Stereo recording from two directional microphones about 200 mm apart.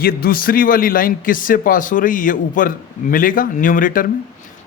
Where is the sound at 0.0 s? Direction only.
45° left (ahead or behind).